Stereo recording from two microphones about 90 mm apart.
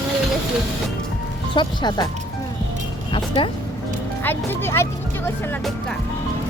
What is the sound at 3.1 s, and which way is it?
Speech, 70° left (ahead or behind).